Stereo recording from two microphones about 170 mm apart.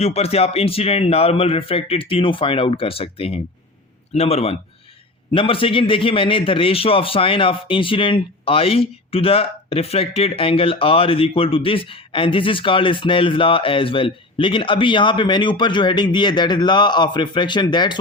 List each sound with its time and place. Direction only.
0.0 s a man's voice: 35° left (ahead or behind)